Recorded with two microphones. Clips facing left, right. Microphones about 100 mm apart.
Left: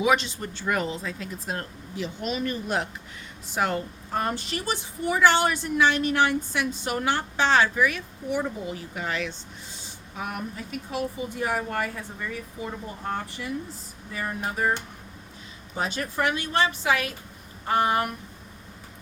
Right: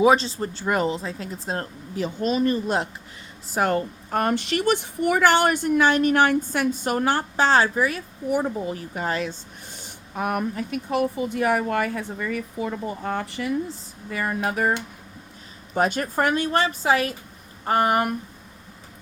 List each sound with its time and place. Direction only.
0.0 s speech: 35° right (ahead or behind)
3.5 s a woman's voice: 45° right (ahead or behind)
9.7 s speech: 50° right (ahead or behind); by 14.7 s 75° right (ahead or behind)
15.7 s a woman's voice: 55° right (ahead or behind)